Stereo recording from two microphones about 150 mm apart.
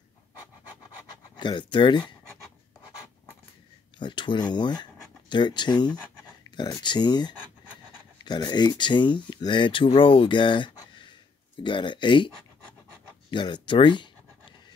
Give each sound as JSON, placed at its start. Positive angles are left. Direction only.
{"t": 1.3, "sound": "speech", "side_deg": 30}
{"t": 4.0, "sound": "speech", "side_deg": 30}
{"t": 13.3, "sound": "a sound", "side_deg": 30}